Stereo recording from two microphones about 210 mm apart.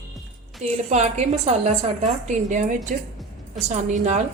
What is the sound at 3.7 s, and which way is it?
Speech, 35° right (ahead or behind).